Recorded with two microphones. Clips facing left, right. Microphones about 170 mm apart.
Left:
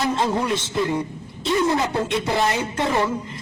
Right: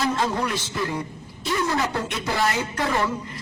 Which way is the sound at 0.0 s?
20° left (ahead or behind).